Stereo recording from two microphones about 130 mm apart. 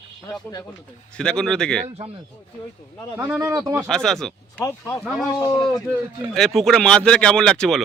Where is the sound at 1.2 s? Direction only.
5° left (ahead or behind).